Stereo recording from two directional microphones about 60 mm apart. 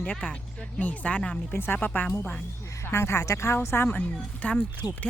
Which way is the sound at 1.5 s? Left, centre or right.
Left.